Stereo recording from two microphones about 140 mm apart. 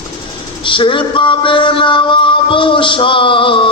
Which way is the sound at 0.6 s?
35° left (ahead or behind).